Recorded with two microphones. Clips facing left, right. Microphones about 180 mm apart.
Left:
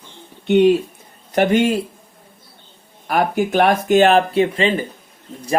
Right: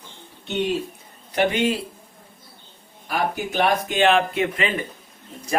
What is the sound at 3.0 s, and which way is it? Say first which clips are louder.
Speech: left 7 dB; 55° left (ahead or behind).